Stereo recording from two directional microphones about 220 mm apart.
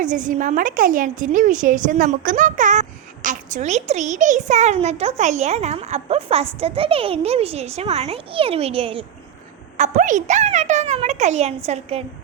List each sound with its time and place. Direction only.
0.0 s a woman's voice: 35° right (ahead or behind)